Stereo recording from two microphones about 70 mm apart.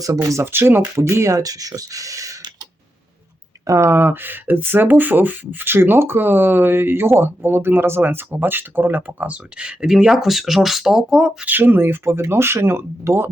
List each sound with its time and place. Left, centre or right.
0.0 s speech: right
0.4 s speech: right
3.7 s speech: right; by 11.4 s centre
11.4 s speech: right